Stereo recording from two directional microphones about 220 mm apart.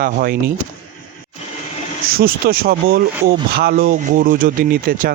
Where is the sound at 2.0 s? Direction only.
40° right (ahead or behind).